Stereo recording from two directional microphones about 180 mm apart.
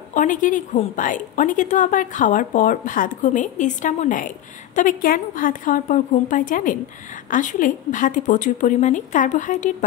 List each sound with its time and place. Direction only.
0.1 s a woman's voice: 45° left (ahead or behind)